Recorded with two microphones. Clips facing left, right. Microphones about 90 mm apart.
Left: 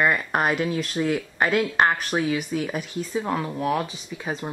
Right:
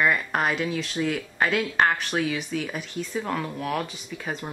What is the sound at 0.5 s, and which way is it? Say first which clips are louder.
Speech: left 3 dB; 45° left (ahead or behind).